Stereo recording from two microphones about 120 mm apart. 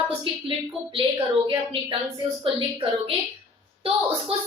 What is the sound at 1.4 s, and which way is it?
A woman's voice, 45° right (ahead or behind).